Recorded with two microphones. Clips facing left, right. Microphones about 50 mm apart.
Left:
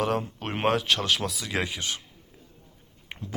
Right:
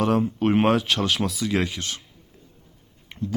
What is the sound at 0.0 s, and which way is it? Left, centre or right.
Speech, centre.